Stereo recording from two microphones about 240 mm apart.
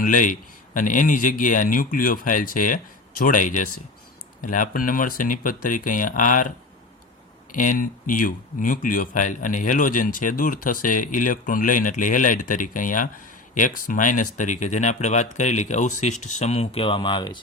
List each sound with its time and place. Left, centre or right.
0.0 s speech: left
7.5 s speech: left